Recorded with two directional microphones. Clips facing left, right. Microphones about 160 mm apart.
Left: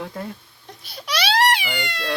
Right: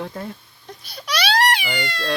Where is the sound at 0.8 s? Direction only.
25° left (ahead or behind).